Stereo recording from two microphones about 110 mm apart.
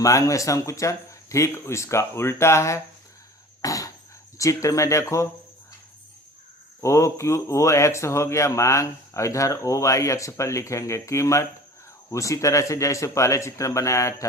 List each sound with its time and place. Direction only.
0.0 s speech: 30° left (ahead or behind)
3.6 s a sound: 30° left (ahead or behind)
4.4 s speech: 30° left (ahead or behind)
6.8 s speech: 25° left (ahead or behind)